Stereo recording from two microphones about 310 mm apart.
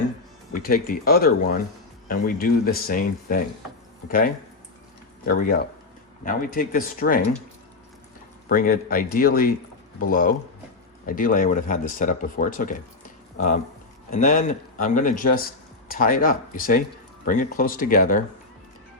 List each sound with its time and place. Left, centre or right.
0.5 s speech: left
5.2 s speech: left
8.4 s speech: left
14.1 s speech: left